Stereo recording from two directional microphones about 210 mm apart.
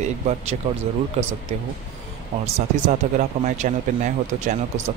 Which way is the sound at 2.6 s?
35° right (ahead or behind).